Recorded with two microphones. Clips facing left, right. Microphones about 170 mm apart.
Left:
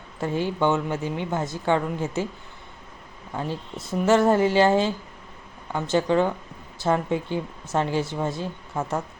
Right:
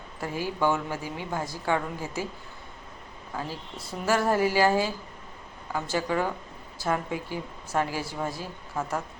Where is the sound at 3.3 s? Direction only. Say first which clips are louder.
Left 5 dB; 25° left (ahead or behind).